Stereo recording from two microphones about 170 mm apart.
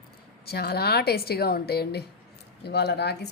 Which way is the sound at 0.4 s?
70° left (ahead or behind).